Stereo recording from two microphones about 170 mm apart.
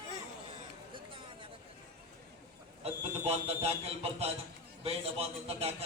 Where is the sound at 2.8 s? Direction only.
35° right (ahead or behind).